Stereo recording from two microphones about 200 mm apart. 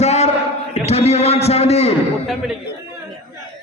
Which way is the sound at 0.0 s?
35° left (ahead or behind).